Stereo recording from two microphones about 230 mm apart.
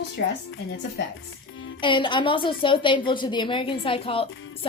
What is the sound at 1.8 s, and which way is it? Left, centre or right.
A woman's voice, left.